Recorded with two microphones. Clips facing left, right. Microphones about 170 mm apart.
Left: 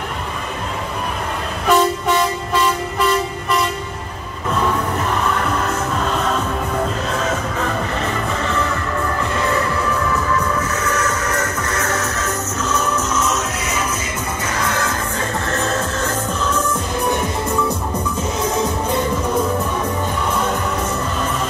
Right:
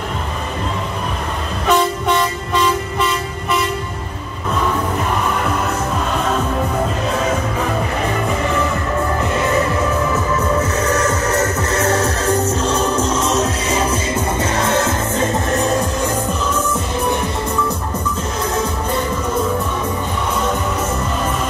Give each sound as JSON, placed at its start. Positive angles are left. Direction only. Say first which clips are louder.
{"t": 1.7, "sound": "train", "louder": "even", "side_deg": 5}
{"t": 10.1, "sound": "music", "louder": "right 2 dB", "side_deg": -25}